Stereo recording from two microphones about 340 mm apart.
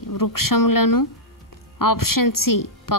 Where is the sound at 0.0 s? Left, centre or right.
Left.